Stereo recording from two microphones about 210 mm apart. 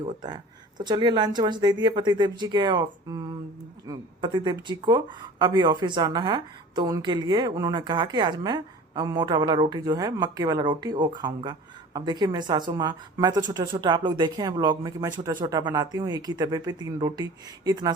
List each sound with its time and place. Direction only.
0.0 s speech: 20° right (ahead or behind)